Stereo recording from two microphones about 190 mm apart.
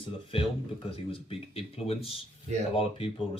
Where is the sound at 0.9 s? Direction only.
30° left (ahead or behind).